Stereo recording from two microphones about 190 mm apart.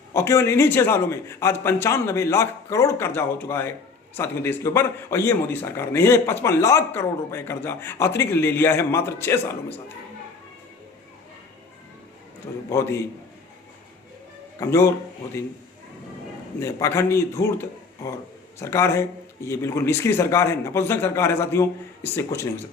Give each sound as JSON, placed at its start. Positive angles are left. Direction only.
{"t": 0.1, "sound": "a man's voice", "side_deg": 15}
{"t": 12.6, "sound": "a man's voice", "side_deg": 15}
{"t": 14.6, "sound": "a man's voice", "side_deg": 15}
{"t": 16.6, "sound": "a man's voice", "side_deg": 15}